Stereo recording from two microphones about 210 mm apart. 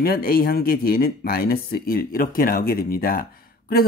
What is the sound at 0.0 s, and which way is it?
A man's voice, 45° left (ahead or behind).